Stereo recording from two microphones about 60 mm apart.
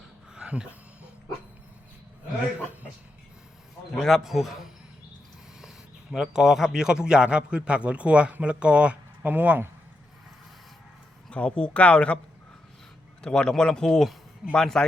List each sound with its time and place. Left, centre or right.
0.3 s a sound: centre
3.9 s a man's voice: centre
6.1 s a man's voice: centre; by 9.6 s right
11.3 s speech: centre
13.2 s speech: centre